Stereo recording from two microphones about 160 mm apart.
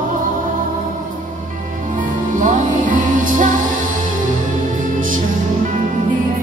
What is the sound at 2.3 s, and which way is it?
Music, 55° right (ahead or behind).